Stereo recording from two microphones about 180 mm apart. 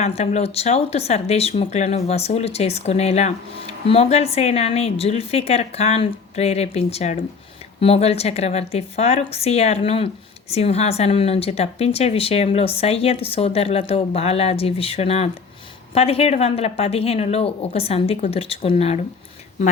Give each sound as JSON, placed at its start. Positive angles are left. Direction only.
{"t": 0.0, "sound": "a woman's voice", "side_deg": 35}